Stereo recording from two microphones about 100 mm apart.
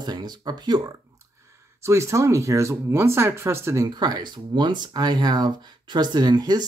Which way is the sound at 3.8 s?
40° right (ahead or behind).